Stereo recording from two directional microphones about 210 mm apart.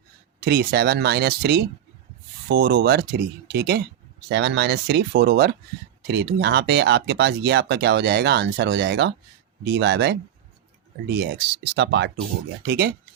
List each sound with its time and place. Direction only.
0.3 s speech: 50° right (ahead or behind)